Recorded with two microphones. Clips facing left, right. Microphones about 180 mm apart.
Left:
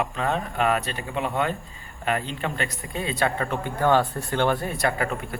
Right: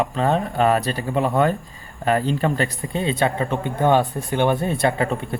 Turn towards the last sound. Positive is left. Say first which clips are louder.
# right 5 dB
turn(degrees=-25)  # may be behind; listen again after turning